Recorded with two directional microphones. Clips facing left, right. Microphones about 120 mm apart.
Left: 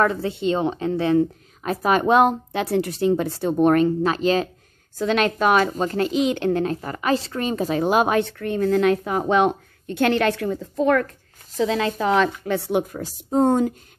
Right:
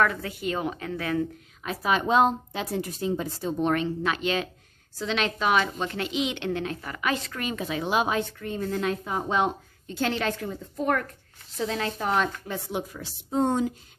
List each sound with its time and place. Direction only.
0.0 s speech: 30° left (ahead or behind)
1.6 s speech: 45° left (ahead or behind)
4.9 s a woman's voice: 50° left (ahead or behind); by 12.3 s 90° left
12.4 s a woman's voice: 70° left (ahead or behind); by 13.7 s 50° left (ahead or behind)